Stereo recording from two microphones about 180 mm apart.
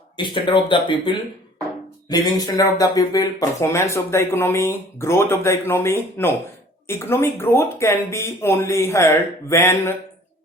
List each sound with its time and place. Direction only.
0.2 s speech: 25° left (ahead or behind)